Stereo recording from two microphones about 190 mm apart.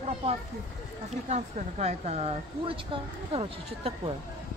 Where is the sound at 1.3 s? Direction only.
35° right (ahead or behind).